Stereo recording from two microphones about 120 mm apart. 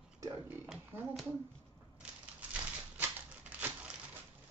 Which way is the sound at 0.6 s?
10° right (ahead or behind).